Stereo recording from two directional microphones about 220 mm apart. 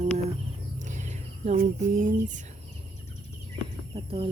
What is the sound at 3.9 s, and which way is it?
Speech, 25° right (ahead or behind).